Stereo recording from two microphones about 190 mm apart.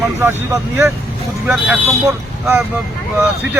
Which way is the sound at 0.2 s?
15° right (ahead or behind).